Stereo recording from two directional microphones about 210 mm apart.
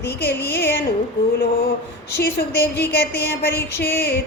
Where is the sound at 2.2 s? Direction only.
50° left (ahead or behind).